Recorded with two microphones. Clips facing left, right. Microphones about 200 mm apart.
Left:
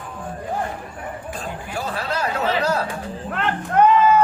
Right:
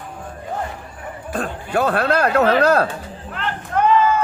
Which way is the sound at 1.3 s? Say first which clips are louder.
Right 11 dB; 65° right (ahead or behind).